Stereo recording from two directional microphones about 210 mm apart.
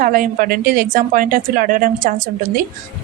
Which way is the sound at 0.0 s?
40° right (ahead or behind).